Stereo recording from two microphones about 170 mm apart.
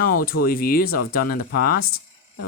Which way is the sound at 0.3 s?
60° left (ahead or behind).